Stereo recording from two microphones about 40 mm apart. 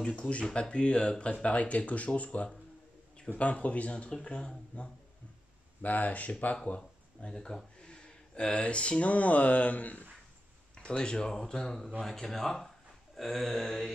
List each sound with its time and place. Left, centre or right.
0.6 s speech: left
5.8 s speech: left
7.2 s speech: left
10.7 s speech: left
13.1 s mantra: centre